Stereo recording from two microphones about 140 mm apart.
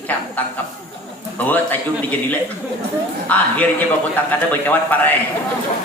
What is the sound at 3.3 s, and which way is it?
Speech, 10° left (ahead or behind).